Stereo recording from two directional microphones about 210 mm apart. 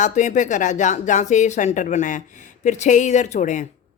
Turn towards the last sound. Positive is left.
turn(degrees=35)  # may be behind; listen again after turning